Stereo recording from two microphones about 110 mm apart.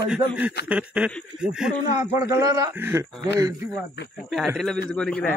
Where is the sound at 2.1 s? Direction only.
25° right (ahead or behind).